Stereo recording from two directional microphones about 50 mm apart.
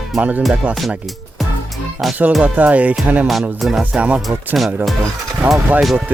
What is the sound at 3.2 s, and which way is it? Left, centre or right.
Music, centre.